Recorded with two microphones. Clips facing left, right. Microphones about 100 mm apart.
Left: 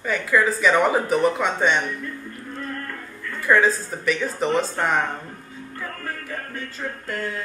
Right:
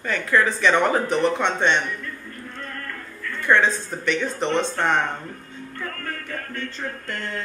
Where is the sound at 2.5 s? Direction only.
15° left (ahead or behind).